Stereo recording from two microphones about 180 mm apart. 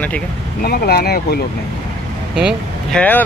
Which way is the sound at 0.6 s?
60° left (ahead or behind).